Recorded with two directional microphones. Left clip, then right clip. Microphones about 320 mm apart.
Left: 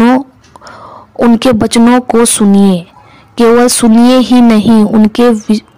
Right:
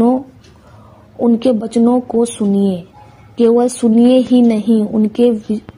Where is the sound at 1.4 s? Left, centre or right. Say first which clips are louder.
Left 6 dB; left.